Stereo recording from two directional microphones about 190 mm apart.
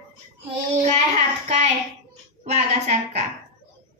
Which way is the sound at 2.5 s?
35° right (ahead or behind).